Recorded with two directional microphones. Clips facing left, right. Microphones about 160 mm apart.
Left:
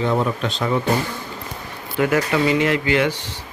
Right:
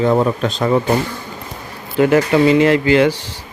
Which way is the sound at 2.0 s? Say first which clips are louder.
Right 6 dB; 30° right (ahead or behind).